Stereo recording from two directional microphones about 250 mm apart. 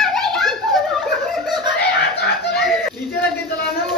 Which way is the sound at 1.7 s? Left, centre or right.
Left.